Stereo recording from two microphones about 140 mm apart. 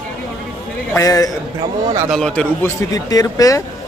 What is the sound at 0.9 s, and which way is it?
Speech, 25° left (ahead or behind).